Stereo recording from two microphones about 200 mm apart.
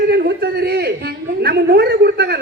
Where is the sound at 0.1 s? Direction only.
55° right (ahead or behind).